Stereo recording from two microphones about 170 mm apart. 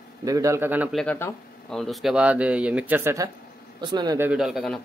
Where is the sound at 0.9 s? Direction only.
5° left (ahead or behind); by 4.1 s 25° right (ahead or behind).